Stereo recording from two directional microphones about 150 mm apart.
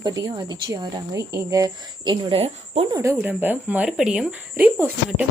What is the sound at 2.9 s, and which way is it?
A woman's voice, 20° right (ahead or behind).